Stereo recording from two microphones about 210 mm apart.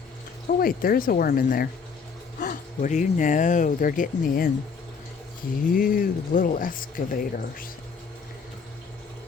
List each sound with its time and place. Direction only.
0.6 s speech: 45° left (ahead or behind)
5.7 s speech: 40° left (ahead or behind)